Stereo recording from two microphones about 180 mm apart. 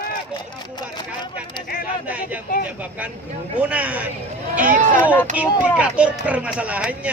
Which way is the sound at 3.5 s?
10° right (ahead or behind).